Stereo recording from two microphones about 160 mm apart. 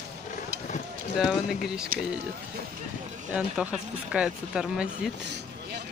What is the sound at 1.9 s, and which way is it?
Speech, 60° right (ahead or behind).